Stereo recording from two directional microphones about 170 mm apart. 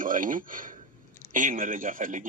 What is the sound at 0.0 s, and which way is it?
A man's voice, 50° right (ahead or behind).